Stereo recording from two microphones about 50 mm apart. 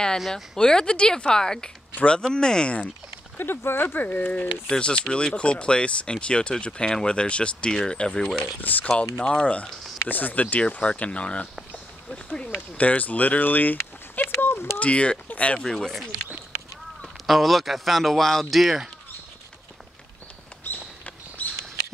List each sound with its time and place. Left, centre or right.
0.3 s speech: centre
3.3 s speech: left
4.6 s speech: centre
8.5 s speech: left
10.0 s speech: left; by 12.4 s centre
12.5 s speech: left
14.4 s a sound: left
14.8 s speech: left
17.3 s speech: centre
20.7 s a sound: left